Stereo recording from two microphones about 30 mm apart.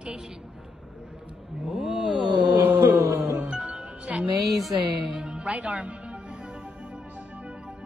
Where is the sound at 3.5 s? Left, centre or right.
Right.